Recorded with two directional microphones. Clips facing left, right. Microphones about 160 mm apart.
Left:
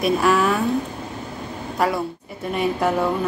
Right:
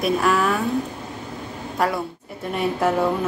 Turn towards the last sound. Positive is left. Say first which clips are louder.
# even
turn(degrees=0)  # may be behind; listen again after turning